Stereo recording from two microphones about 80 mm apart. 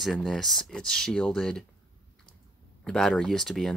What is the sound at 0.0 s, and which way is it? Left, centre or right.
Speech, centre.